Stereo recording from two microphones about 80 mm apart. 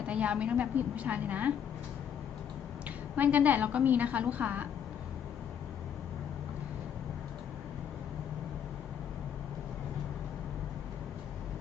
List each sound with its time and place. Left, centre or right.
0.0 s a woman's voice: centre
3.2 s a woman's voice: right